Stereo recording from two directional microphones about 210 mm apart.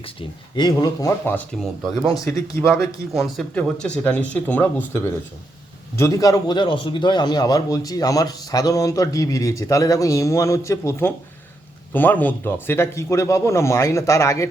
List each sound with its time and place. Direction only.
0.0 s a man's voice: 25° left (ahead or behind)
3.2 s a man's voice: centre (ahead or behind)